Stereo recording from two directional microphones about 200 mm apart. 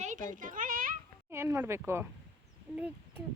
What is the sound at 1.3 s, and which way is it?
Speech, 15° right (ahead or behind).